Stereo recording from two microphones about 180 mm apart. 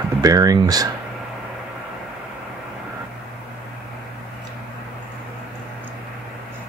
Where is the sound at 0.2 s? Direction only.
20° right (ahead or behind).